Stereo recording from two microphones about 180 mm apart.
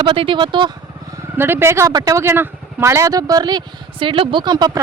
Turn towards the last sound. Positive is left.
turn(degrees=-25)  # may be behind; listen again after turning